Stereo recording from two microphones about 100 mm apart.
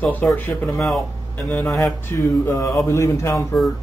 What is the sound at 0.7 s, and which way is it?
Speech, centre (ahead or behind).